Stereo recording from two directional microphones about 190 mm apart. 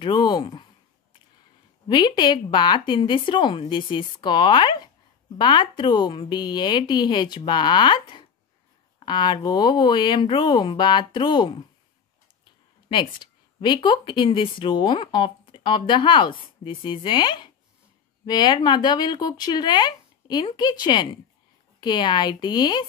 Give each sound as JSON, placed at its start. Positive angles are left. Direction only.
{"t": 0.0, "sound": "speech", "side_deg": 25}
{"t": 1.9, "sound": "speech", "side_deg": 25}
{"t": 12.8, "sound": "speech", "side_deg": 25}